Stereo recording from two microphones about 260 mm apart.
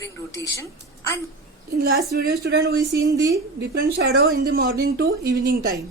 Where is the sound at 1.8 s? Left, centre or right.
Right.